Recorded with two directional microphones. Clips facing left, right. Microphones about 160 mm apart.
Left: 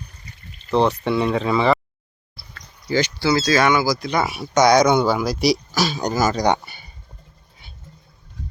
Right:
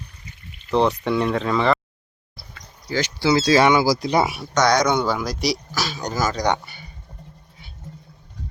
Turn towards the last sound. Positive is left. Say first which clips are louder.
# left 3 dB
turn(degrees=10)  # may be behind; listen again after turning